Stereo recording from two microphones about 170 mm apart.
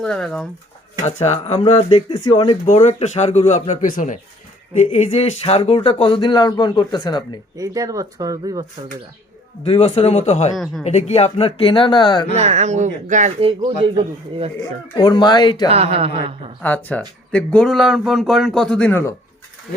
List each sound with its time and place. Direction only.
0.0 s speech: centre (ahead or behind)
1.0 s speech: 40° left (ahead or behind)
2.7 s speech: 40° left (ahead or behind)
7.5 s speech: 20° right (ahead or behind)
9.6 s speech: 30° left (ahead or behind)
10.5 s speech: centre (ahead or behind)
10.8 s speech: 40° left (ahead or behind)
12.3 s speech: 40° right (ahead or behind)
13.4 s speech: 30° right (ahead or behind)
14.6 s speech: 25° left (ahead or behind)
15.7 s speech: 35° right (ahead or behind)
16.6 s speech: 10° left (ahead or behind)